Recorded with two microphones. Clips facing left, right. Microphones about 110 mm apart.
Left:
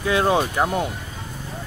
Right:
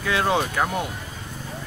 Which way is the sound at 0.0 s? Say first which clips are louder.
Left 3 dB; 25° left (ahead or behind).